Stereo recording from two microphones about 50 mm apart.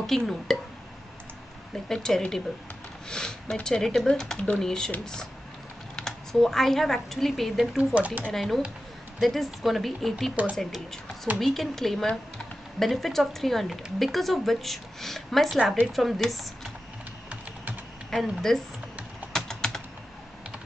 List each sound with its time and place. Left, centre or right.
0.0 s speech: centre
1.9 s speech: centre
5.9 s speech: centre
7.7 s speech: right
8.3 s a woman's voice: centre
16.2 s speech: centre
18.5 s a woman's voice: centre
19.3 s typing: centre